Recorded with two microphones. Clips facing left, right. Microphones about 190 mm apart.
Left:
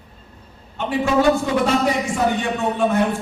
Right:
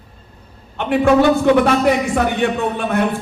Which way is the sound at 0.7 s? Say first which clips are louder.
Right 5 dB; 60° right (ahead or behind).